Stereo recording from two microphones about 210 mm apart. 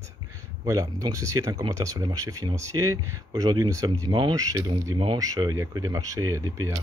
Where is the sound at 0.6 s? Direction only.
15° right (ahead or behind).